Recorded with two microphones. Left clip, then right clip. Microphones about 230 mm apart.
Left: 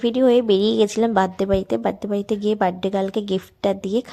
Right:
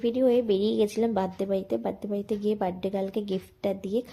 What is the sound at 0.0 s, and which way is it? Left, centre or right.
A woman's voice, left.